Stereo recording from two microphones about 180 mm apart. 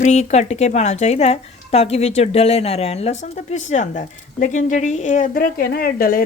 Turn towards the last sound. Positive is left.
turn(degrees=55)  # may be behind; listen again after turning